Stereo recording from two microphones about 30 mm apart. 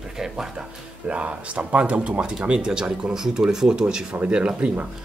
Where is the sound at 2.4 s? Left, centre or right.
Right.